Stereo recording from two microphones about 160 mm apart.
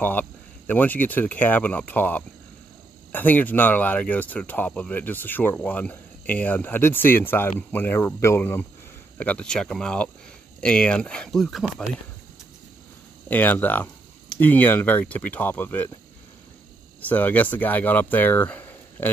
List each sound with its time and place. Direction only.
0.0 s speech: 10° left (ahead or behind)
13.3 s speech: 10° left (ahead or behind)
17.0 s speech: 10° left (ahead or behind)